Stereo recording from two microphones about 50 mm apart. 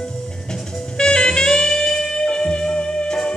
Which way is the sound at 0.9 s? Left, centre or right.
Centre.